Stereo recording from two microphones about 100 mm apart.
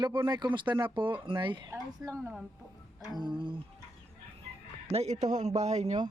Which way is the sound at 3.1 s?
50° right (ahead or behind).